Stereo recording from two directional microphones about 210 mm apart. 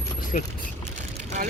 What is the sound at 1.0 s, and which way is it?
Boat, 35° right (ahead or behind).